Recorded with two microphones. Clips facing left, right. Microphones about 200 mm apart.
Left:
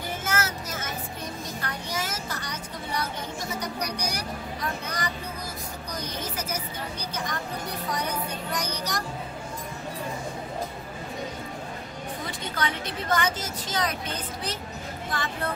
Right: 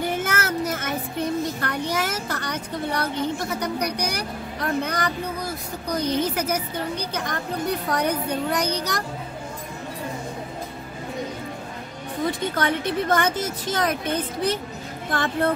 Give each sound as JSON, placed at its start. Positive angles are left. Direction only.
{"t": 0.0, "sound": "child singing", "side_deg": -60}
{"t": 1.6, "sound": "a woman's voice", "side_deg": -60}
{"t": 12.3, "sound": "a woman's voice", "side_deg": -55}